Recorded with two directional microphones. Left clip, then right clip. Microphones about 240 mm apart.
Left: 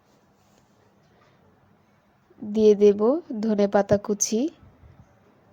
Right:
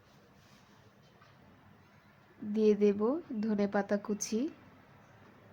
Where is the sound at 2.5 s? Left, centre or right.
Left.